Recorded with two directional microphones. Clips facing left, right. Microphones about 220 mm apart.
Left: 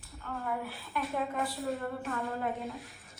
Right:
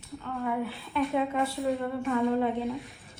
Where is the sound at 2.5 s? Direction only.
Centre (ahead or behind).